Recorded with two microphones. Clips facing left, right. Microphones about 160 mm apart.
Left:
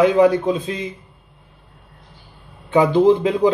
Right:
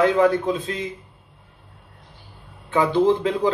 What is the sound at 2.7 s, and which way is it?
Speech, 15° left (ahead or behind).